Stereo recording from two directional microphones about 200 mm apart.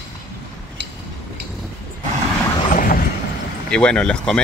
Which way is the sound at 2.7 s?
45° left (ahead or behind).